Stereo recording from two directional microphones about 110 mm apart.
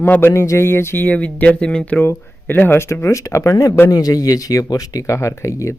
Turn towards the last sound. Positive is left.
turn(degrees=30)  # may be behind; listen again after turning